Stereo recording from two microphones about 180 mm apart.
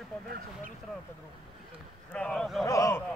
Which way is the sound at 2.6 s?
15° left (ahead or behind).